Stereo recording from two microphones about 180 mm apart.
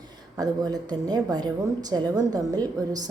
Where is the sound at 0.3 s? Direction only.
20° right (ahead or behind).